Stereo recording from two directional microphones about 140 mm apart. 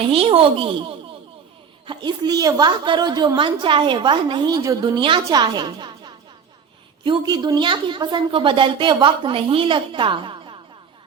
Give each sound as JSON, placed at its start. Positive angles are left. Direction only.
{"t": 0.0, "sound": "a woman's voice", "side_deg": -40}